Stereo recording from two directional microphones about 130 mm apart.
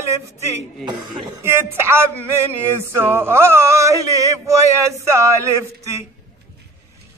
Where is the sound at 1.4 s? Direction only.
20° right (ahead or behind).